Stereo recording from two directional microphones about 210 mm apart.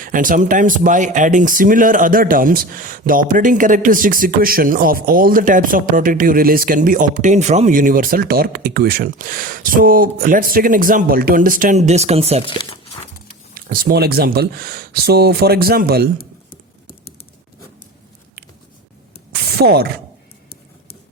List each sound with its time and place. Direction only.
0.0 s speech: 40° right (ahead or behind)
12.5 s speech: 25° left (ahead or behind)
13.5 s speech: 40° right (ahead or behind)
19.3 s a sound: 50° right (ahead or behind)